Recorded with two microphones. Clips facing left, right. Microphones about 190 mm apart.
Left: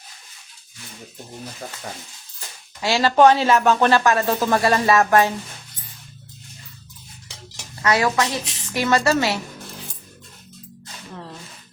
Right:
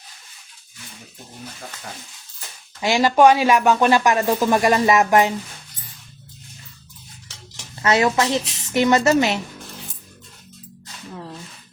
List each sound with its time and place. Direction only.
2.8 s speech: 15° right (ahead or behind)
7.3 s dishes: 15° left (ahead or behind)
7.8 s speech: 25° right (ahead or behind)